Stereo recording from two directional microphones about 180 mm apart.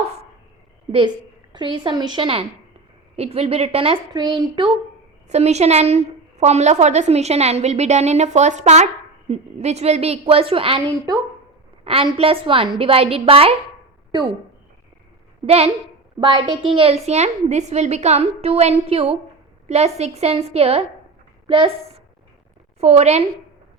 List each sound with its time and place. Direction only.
0.9 s a woman's voice: 25° right (ahead or behind)
5.3 s a woman's voice: 40° right (ahead or behind)
11.9 s a woman's voice: 30° right (ahead or behind)
15.4 s a woman's voice: 35° right (ahead or behind)